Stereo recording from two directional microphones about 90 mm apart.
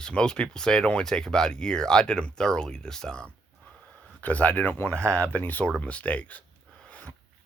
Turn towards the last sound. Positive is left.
turn(degrees=15)  # may be behind; listen again after turning